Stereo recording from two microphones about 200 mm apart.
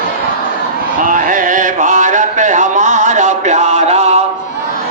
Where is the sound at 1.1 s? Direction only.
40° right (ahead or behind).